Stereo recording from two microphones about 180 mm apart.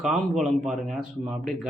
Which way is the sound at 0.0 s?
Centre (ahead or behind).